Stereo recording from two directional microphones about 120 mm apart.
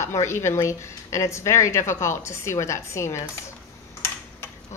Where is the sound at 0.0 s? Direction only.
25° left (ahead or behind).